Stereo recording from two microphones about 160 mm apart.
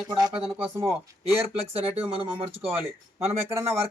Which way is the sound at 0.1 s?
25° right (ahead or behind).